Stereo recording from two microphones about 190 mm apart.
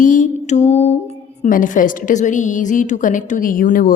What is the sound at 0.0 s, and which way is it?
Music, 45° left (ahead or behind).